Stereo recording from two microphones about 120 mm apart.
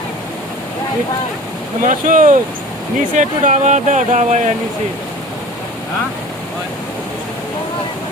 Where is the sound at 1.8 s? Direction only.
90° right.